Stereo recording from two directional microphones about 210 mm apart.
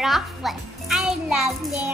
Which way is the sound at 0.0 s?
Centre (ahead or behind).